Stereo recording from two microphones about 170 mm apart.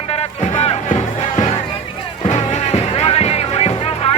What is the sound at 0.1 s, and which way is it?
Music, 35° left (ahead or behind).